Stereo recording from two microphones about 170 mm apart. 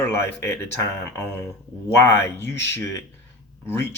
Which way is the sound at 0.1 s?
15° left (ahead or behind).